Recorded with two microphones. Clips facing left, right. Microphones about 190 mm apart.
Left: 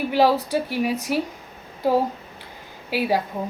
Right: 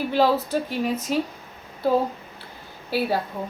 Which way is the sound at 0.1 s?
10° left (ahead or behind).